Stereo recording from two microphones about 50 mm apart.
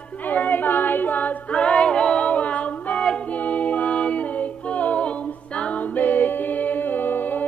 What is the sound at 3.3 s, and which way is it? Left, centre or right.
Music, left.